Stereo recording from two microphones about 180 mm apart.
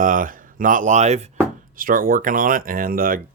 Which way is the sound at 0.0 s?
50° right (ahead or behind).